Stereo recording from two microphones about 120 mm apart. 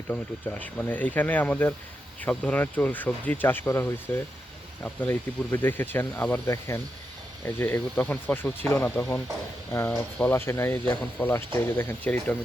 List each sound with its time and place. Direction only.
0.1 s speech: 15° left (ahead or behind)